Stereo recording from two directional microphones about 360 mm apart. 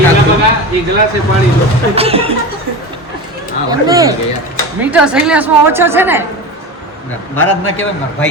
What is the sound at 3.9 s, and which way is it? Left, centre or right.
A man's voice, centre.